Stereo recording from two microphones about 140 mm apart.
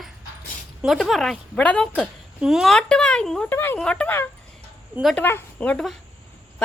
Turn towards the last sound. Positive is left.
turn(degrees=10)  # may be behind; listen again after turning